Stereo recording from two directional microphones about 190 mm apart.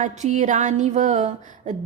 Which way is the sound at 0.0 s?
40° right (ahead or behind).